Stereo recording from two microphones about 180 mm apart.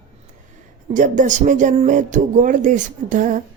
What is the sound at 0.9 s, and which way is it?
Speech, 45° right (ahead or behind).